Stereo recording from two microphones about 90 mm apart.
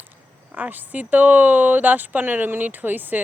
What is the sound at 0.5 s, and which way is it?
Speech, 20° right (ahead or behind).